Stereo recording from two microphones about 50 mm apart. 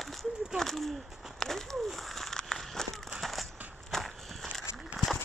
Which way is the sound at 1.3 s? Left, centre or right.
Centre.